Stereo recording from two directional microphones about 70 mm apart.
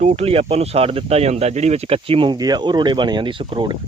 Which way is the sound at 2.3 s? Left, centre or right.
Right.